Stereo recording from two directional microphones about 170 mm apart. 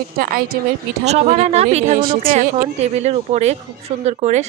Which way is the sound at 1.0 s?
40° right (ahead or behind).